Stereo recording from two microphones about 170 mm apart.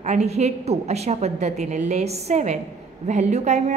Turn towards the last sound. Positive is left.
turn(degrees=-40)  # may be behind; listen again after turning